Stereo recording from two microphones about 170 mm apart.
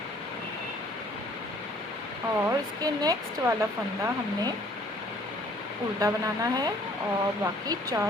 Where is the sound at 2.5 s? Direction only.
20° right (ahead or behind).